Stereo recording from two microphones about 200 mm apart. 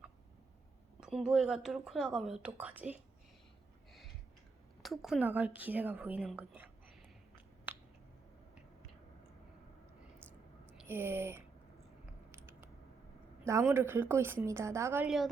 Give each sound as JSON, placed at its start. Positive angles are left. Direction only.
{"t": 0.9, "sound": "a woman's voice", "side_deg": -5}
{"t": 4.8, "sound": "a woman's voice", "side_deg": 0}
{"t": 10.8, "sound": "speech", "side_deg": -10}
{"t": 12.3, "sound": "a sound", "side_deg": -10}
{"t": 13.4, "sound": "a woman's voice", "side_deg": -15}